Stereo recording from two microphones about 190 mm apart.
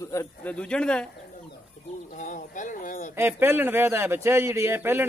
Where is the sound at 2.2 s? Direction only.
40° left (ahead or behind).